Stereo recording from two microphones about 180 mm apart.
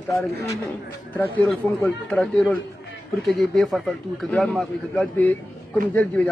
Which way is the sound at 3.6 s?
Centre (ahead or behind).